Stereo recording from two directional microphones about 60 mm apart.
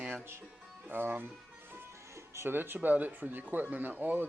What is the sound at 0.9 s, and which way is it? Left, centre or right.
Speech, right.